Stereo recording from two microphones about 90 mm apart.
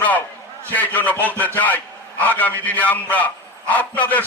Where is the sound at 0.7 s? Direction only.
20° left (ahead or behind).